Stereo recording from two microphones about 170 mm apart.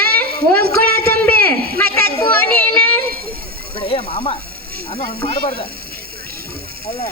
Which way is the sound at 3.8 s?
30° left (ahead or behind).